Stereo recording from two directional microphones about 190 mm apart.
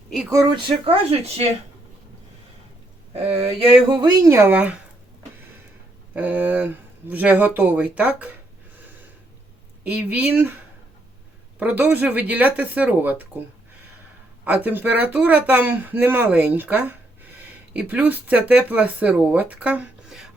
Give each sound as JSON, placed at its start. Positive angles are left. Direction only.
{"t": 0.7, "sound": "speech", "side_deg": -30}
{"t": 3.3, "sound": "speech", "side_deg": -30}
{"t": 6.1, "sound": "speech", "side_deg": -10}
{"t": 11.6, "sound": "speech", "side_deg": -10}
{"t": 14.4, "sound": "speech", "side_deg": -10}